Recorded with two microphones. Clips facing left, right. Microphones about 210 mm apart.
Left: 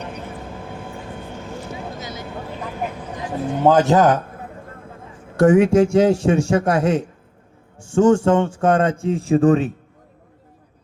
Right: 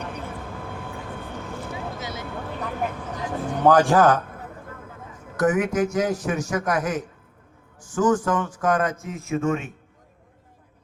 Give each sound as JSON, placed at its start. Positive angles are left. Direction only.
{"t": 2.0, "sound": "vehicle", "side_deg": -25}
{"t": 3.2, "sound": "speech", "side_deg": 25}
{"t": 5.4, "sound": "a man's voice", "side_deg": 30}